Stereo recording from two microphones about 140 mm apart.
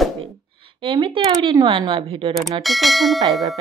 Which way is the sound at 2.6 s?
Centre (ahead or behind).